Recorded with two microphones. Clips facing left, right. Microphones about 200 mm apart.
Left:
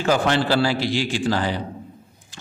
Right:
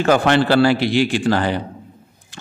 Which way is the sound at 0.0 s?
60° right (ahead or behind).